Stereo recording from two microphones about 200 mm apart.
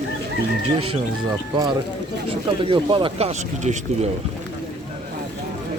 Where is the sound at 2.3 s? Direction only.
25° right (ahead or behind).